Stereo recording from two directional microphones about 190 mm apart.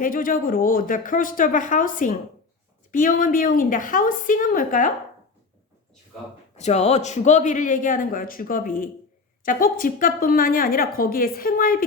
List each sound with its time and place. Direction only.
0.0 s a woman's voice: 45° left (ahead or behind)
6.6 s a woman's voice: 35° left (ahead or behind)